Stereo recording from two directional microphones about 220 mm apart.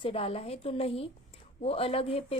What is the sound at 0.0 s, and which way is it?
A woman's voice, 25° left (ahead or behind).